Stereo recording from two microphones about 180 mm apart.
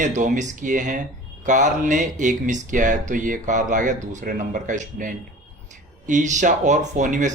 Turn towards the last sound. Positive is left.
turn(degrees=-45)  # may be behind; listen again after turning